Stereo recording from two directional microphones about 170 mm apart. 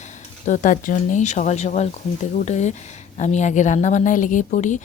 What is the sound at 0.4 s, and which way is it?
Speech, 50° left (ahead or behind).